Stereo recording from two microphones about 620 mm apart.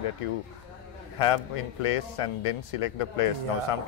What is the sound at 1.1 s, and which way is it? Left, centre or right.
Speech, left.